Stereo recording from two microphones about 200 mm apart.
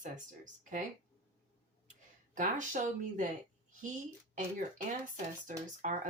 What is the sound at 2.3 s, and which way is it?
Speech, 40° right (ahead or behind).